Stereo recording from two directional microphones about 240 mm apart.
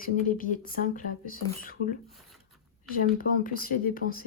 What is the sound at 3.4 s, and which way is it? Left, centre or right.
Speech, left.